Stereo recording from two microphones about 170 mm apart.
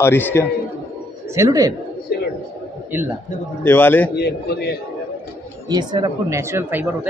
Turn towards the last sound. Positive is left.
turn(degrees=-15)  # may be behind; listen again after turning